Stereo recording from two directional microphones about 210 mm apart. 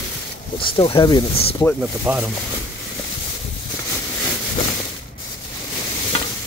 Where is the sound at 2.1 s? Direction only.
10° right (ahead or behind).